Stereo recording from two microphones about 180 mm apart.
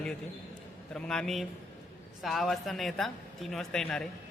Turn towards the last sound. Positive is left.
turn(degrees=5)  # may be behind; listen again after turning